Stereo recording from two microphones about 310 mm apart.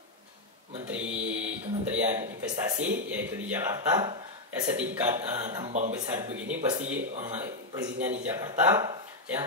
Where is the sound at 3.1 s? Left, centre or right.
Centre.